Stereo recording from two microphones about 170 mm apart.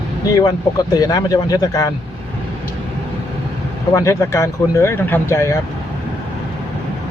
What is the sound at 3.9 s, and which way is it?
Speech, 15° left (ahead or behind).